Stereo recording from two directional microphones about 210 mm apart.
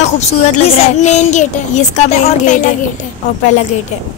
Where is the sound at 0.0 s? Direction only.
35° left (ahead or behind).